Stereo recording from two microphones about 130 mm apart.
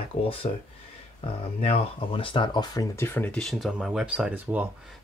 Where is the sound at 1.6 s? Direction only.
50° left (ahead or behind); by 4.7 s 10° right (ahead or behind).